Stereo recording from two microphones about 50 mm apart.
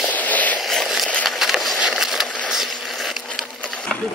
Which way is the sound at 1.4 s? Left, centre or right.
Centre.